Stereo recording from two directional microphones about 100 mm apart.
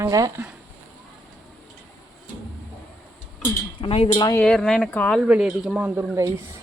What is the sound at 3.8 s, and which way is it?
Speech, 75° left (ahead or behind).